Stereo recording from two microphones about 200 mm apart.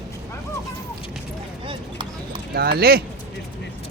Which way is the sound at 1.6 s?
25° right (ahead or behind).